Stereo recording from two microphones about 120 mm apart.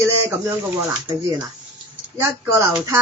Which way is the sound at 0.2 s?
20° right (ahead or behind).